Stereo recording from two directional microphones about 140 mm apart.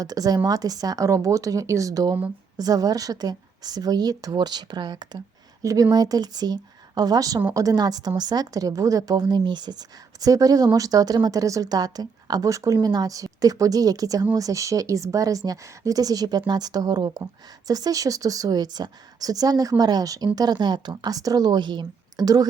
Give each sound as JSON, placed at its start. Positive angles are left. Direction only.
{"t": 0.0, "sound": "a woman's voice", "side_deg": -25}